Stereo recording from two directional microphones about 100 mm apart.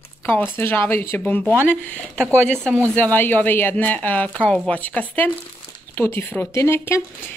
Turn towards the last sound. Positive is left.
turn(degrees=25)  # may be behind; listen again after turning